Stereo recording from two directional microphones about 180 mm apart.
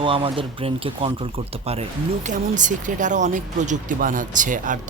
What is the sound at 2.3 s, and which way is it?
Speech, 45° right (ahead or behind).